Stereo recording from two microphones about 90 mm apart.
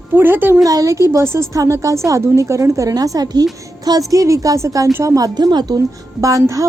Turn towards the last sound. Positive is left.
turn(degrees=-40)  # may be behind; listen again after turning